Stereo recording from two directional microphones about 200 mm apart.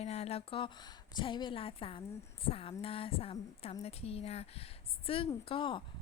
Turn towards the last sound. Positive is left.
turn(degrees=25)  # may be behind; listen again after turning